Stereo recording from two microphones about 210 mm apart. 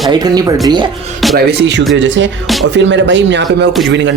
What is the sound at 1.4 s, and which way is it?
Speech, 55° right (ahead or behind).